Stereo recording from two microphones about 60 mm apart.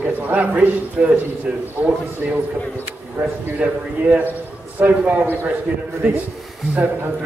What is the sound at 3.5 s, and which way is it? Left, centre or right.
A man's voice, right.